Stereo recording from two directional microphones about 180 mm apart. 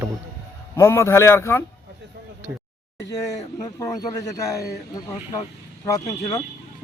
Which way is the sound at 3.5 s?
20° left (ahead or behind).